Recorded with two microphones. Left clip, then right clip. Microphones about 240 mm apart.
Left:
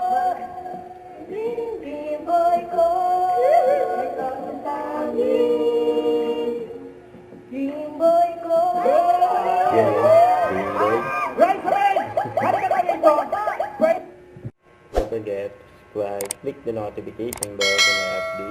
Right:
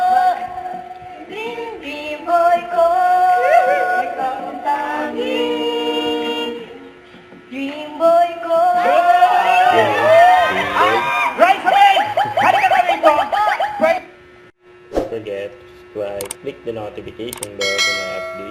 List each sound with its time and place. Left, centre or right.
0.1 s a sound: right
1.3 s female singing: centre
5.5 s choir: right
7.7 s a sound: right
14.9 s music: centre
16.0 s speech: centre